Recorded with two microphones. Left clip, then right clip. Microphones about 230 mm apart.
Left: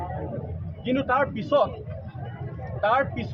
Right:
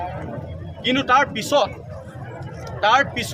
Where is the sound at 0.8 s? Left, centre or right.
Right.